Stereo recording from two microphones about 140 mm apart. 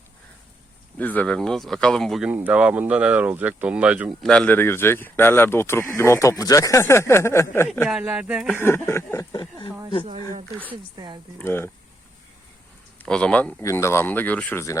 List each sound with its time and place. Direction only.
0.9 s speech: 10° left (ahead or behind)
2.3 s speech: 10° right (ahead or behind)
4.2 s speech: 5° left (ahead or behind)
7.9 s speech: 5° right (ahead or behind)
8.5 s speech: 15° left (ahead or behind)
9.3 s speech: 35° left (ahead or behind)
10.9 s speech: 30° right (ahead or behind)
11.3 s speech: 15° left (ahead or behind)
13.0 s speech: 5° left (ahead or behind)
13.6 s speech: 20° left (ahead or behind)